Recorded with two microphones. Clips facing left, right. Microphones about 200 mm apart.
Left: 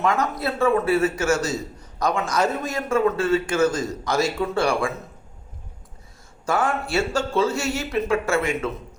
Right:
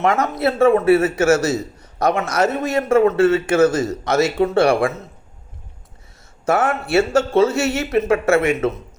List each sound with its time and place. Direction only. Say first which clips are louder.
0.0 s a man's voice: right 5 dB; 70° right (ahead or behind)
6.4 s a man's voice: right 5 dB; 65° right (ahead or behind)